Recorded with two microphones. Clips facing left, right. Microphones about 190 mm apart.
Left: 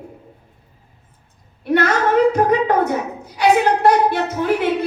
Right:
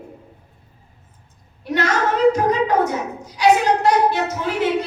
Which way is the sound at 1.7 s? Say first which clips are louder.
Left 4 dB; 55° left (ahead or behind).